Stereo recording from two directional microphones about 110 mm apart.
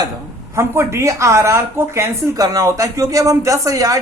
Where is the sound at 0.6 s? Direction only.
25° right (ahead or behind).